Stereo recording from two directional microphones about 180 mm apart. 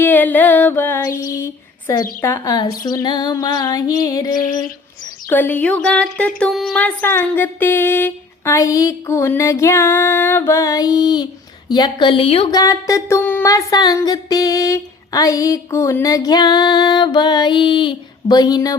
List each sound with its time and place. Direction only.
0.0 s female singing: 10° left (ahead or behind)
2.2 s speech: 15° left (ahead or behind)
5.3 s a sound: 10° left (ahead or behind)
11.7 s speech: 25° left (ahead or behind)